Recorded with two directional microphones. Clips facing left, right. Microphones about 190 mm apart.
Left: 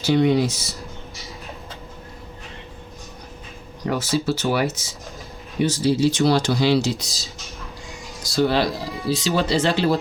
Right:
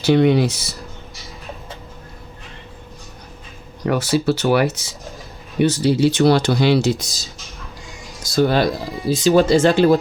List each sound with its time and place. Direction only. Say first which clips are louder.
0.0 s speech: right 3 dB; 65° right (ahead or behind)
3.8 s speech: right 4 dB; 65° right (ahead or behind)
8.2 s speech: right 3 dB; 50° right (ahead or behind)